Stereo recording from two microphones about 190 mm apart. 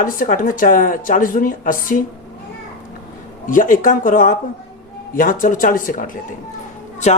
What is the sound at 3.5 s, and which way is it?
A man's voice, 45° left (ahead or behind).